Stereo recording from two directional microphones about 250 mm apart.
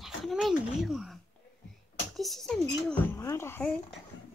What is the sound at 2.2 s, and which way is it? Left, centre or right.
Speech, centre.